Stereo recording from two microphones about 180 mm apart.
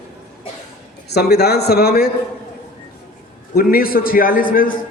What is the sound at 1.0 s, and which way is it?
A man's voice, 65° left (ahead or behind).